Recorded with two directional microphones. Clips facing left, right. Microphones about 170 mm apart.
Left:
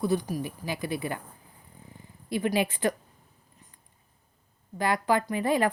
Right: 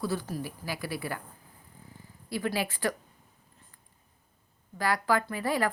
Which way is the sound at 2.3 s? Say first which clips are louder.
Left 4 dB; 20° left (ahead or behind).